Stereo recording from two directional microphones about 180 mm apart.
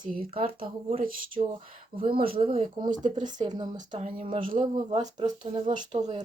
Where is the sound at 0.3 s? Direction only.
30° right (ahead or behind).